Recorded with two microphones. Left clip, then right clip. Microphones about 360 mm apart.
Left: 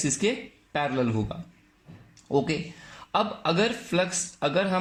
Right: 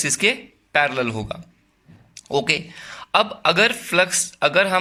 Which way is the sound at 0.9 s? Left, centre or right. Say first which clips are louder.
Right 4 dB; right.